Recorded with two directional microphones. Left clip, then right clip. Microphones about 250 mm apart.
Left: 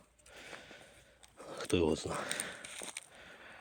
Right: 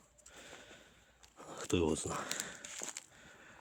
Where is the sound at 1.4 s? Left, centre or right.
Centre.